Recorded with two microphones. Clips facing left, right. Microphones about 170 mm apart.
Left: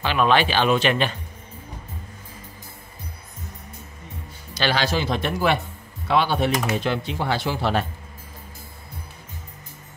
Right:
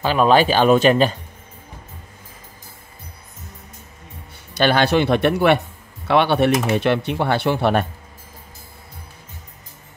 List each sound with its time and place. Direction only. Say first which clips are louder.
0.0 s speech: right 5 dB; 40° right (ahead or behind)
4.6 s speech: right 7 dB; 55° right (ahead or behind)